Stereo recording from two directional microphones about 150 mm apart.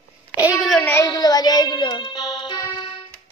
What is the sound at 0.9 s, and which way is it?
Music, 25° left (ahead or behind).